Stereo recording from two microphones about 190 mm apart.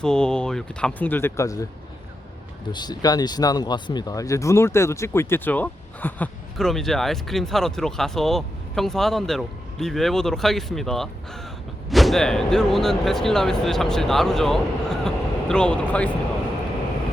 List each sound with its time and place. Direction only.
0.0 s speech: 5° left (ahead or behind)
2.7 s speech: 20° left (ahead or behind)